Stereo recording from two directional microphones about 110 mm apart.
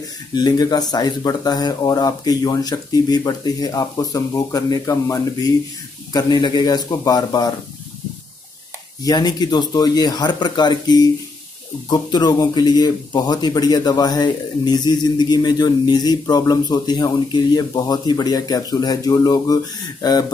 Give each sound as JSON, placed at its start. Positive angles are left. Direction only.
{"t": 0.3, "sound": "speech", "side_deg": 40}
{"t": 9.0, "sound": "speech", "side_deg": 40}